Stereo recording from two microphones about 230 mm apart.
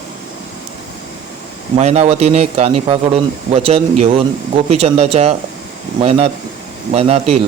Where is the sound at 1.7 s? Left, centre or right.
Right.